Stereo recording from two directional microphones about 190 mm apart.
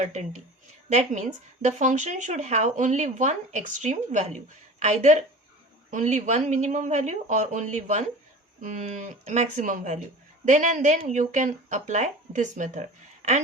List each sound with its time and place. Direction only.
0.0 s speech: 35° right (ahead or behind)